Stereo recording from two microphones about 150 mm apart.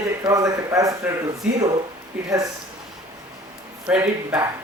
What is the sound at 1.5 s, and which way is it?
Speech, 5° right (ahead or behind).